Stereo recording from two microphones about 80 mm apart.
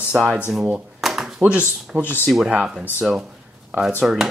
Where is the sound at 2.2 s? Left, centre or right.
Centre.